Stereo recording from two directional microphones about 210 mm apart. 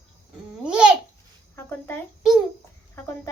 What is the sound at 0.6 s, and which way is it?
Babbling, 5° right (ahead or behind).